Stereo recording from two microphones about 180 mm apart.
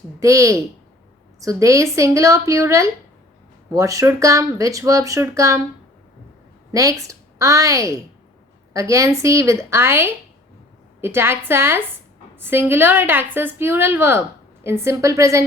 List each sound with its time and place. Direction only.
0.2 s a woman's voice: 15° right (ahead or behind)
6.7 s a woman's voice: 20° right (ahead or behind)